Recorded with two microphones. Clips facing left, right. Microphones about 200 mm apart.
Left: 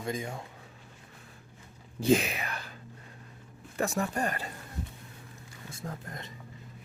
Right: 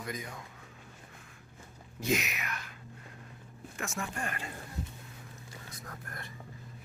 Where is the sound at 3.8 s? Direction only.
35° left (ahead or behind).